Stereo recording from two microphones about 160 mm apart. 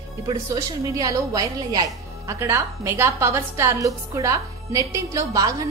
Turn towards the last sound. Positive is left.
turn(degrees=-20)  # may be behind; listen again after turning